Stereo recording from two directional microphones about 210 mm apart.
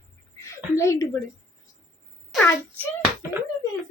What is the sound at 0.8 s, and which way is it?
Speech, 15° left (ahead or behind).